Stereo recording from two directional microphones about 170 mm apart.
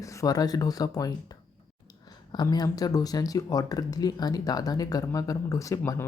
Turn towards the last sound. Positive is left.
turn(degrees=15)  # may be behind; listen again after turning